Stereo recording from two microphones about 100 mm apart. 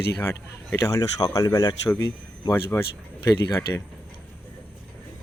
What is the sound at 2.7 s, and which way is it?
Speech, 25° left (ahead or behind).